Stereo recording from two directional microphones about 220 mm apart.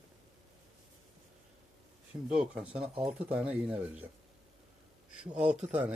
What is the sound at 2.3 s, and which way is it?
Speech, 5° right (ahead or behind).